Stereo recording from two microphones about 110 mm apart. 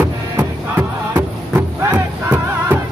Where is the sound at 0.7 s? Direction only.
20° right (ahead or behind).